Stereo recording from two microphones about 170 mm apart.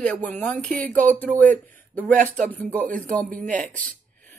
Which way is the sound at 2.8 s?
50° right (ahead or behind).